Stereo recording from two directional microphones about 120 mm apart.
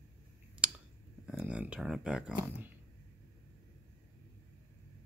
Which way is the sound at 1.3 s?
10° right (ahead or behind).